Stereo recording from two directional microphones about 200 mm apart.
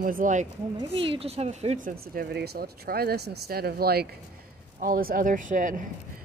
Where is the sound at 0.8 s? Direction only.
25° right (ahead or behind).